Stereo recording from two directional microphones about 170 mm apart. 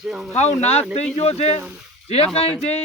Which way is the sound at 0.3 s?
40° left (ahead or behind).